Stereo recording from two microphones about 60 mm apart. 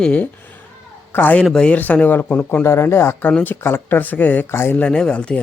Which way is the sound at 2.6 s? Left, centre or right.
Left.